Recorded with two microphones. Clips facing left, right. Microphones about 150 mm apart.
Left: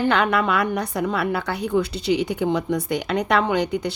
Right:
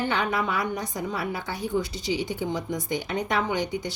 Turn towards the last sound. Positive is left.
turn(degrees=65)  # may be behind; listen again after turning